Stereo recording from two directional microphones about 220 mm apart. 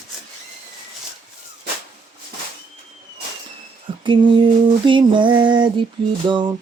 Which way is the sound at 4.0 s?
20° right (ahead or behind).